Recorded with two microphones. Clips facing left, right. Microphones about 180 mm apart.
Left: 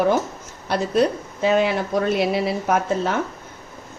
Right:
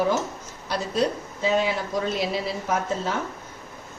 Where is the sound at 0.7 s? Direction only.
60° left (ahead or behind).